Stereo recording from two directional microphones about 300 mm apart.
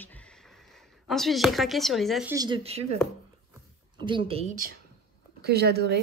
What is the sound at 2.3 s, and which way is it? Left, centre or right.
Speech, centre.